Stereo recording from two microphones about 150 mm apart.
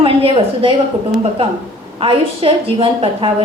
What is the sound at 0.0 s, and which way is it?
Speech, 35° right (ahead or behind).